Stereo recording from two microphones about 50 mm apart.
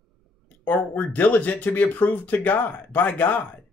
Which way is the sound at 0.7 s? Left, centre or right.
Left.